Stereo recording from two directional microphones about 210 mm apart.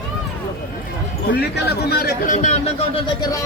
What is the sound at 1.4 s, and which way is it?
Speech, 50° left (ahead or behind).